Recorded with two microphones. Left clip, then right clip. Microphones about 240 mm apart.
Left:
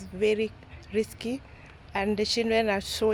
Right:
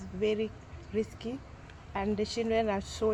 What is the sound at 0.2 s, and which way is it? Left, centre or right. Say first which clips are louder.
Speech: left 5 dB; left.